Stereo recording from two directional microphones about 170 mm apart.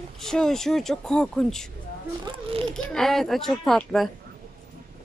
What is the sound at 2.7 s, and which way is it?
Speech, centre (ahead or behind).